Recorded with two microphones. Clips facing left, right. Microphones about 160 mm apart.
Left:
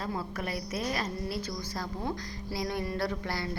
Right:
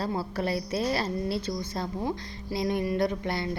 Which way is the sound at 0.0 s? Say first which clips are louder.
Right 5 dB; 30° right (ahead or behind).